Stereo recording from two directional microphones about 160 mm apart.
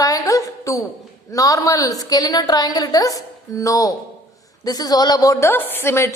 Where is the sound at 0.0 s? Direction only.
20° left (ahead or behind).